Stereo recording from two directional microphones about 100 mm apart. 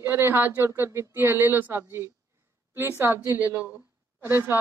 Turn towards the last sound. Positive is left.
turn(degrees=-25)  # may be behind; listen again after turning